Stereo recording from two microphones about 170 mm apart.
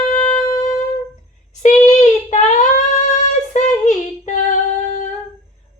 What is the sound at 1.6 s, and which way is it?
Child singing, 45° left (ahead or behind).